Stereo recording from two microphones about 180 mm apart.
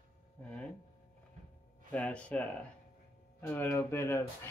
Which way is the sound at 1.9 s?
5° left (ahead or behind).